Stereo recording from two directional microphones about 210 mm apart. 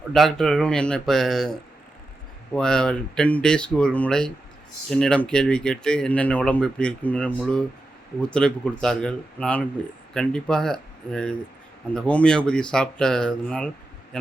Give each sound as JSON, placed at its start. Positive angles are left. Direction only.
{"t": 0.1, "sound": "speech", "side_deg": 0}
{"t": 2.6, "sound": "speech", "side_deg": 5}